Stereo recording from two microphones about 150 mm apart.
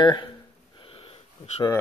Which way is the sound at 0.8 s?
40° left (ahead or behind).